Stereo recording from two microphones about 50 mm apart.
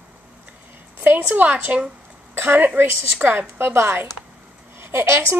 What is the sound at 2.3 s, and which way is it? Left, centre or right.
A woman's voice, right.